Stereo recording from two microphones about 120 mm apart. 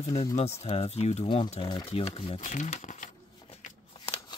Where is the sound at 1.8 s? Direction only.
50° left (ahead or behind).